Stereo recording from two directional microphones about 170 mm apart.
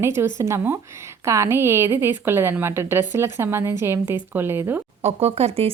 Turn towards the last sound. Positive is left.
turn(degrees=-35)  # may be behind; listen again after turning